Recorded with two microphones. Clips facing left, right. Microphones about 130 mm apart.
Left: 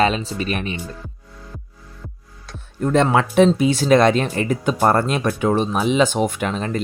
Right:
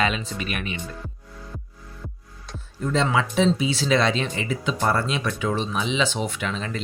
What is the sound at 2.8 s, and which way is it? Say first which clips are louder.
Speech: left 6 dB; 55° left (ahead or behind).